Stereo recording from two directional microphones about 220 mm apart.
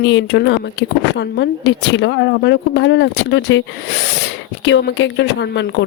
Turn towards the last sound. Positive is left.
turn(degrees=55)  # may be behind; listen again after turning